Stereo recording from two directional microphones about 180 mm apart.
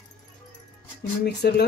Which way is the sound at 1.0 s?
65° left (ahead or behind).